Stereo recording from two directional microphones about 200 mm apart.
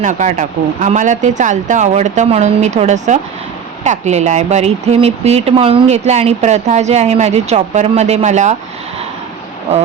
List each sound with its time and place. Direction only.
0.0 s speech: 40° right (ahead or behind)